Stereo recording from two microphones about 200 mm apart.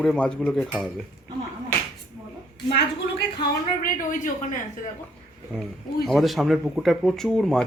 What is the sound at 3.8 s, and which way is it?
Speech, 40° left (ahead or behind).